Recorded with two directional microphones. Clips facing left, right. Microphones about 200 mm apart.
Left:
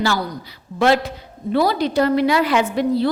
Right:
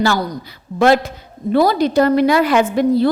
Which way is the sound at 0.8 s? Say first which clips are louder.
Right 3 dB; 45° right (ahead or behind).